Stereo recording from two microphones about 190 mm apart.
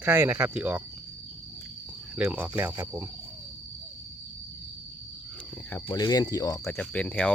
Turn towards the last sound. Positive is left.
turn(degrees=5)  # may be behind; listen again after turning